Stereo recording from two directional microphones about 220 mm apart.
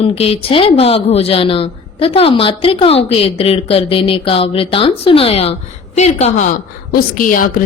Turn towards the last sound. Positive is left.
turn(degrees=40)  # may be behind; listen again after turning